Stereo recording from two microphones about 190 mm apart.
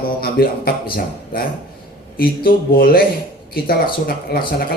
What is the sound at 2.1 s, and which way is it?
Speech, 50° left (ahead or behind).